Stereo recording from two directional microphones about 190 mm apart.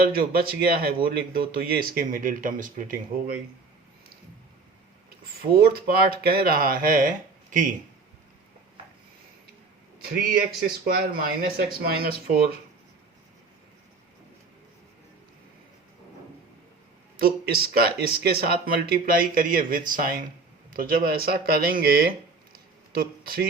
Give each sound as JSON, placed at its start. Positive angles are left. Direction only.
{"t": 0.0, "sound": "speech", "side_deg": -55}
{"t": 5.5, "sound": "speech", "side_deg": -50}
{"t": 10.8, "sound": "speech", "side_deg": -50}
{"t": 17.2, "sound": "speech", "side_deg": -50}
{"t": 22.5, "sound": "a sound", "side_deg": -50}